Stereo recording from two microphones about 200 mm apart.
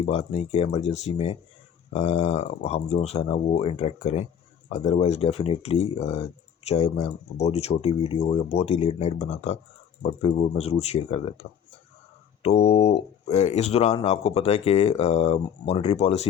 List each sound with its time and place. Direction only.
0.0 s speech: 30° left (ahead or behind)